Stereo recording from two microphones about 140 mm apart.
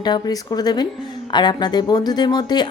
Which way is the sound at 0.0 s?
30° left (ahead or behind).